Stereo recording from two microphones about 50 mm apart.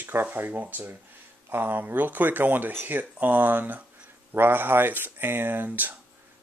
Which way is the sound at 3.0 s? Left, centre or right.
Right.